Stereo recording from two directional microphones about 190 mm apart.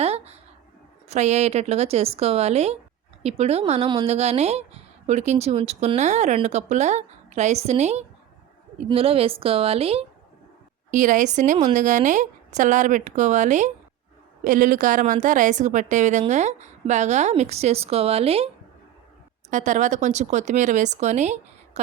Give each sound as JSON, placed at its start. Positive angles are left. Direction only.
{"t": 0.0, "sound": "a sound", "side_deg": -35}
{"t": 1.0, "sound": "a woman's voice", "side_deg": -35}
{"t": 10.9, "sound": "a woman's voice", "side_deg": -40}
{"t": 19.5, "sound": "a woman's voice", "side_deg": -40}